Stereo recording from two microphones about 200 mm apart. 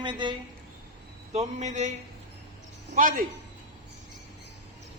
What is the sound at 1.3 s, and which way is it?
Speech, 35° right (ahead or behind).